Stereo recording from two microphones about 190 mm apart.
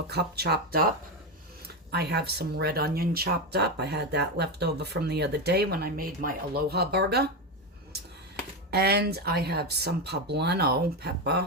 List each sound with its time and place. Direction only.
0.1 s speech: 60° right (ahead or behind)
8.7 s speech: 55° right (ahead or behind)